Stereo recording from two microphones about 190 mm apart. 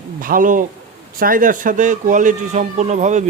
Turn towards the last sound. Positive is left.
turn(degrees=-40)  # may be behind; listen again after turning